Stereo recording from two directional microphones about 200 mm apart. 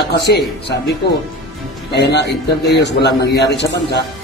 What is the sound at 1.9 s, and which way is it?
A man's voice, 55° left (ahead or behind).